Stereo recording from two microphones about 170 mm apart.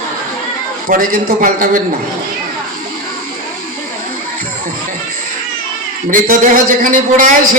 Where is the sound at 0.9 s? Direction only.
55° right (ahead or behind).